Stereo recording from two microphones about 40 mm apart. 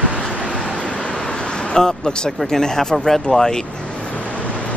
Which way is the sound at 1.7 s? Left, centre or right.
Centre.